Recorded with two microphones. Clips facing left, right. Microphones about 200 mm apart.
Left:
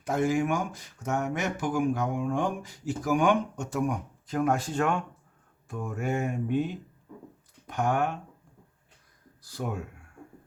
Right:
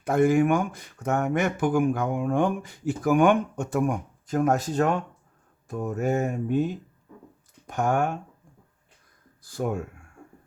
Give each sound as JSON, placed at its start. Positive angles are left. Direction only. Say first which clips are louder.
{"t": 0.0, "sound": "speech", "louder": "right 6 dB", "side_deg": -55}
{"t": 9.4, "sound": "speech", "louder": "right 6 dB", "side_deg": -50}